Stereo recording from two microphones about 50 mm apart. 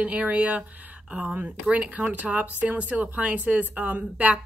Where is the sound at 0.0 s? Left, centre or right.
Right.